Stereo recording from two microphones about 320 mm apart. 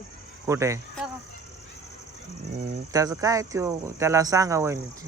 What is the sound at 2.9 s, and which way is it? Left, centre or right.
Speech, centre.